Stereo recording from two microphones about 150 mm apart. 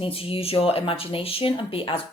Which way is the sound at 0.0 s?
40° left (ahead or behind).